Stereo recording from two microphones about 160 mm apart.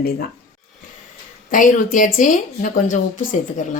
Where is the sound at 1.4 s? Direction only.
55° left (ahead or behind).